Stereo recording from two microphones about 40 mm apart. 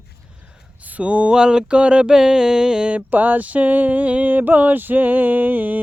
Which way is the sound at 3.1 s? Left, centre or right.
Right.